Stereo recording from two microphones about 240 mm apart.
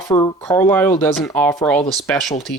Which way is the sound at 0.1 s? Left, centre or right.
Centre.